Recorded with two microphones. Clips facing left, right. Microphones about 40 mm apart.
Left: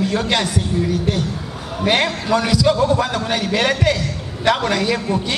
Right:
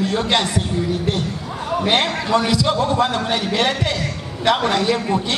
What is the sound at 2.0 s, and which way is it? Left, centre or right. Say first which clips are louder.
A man's voice: even; centre.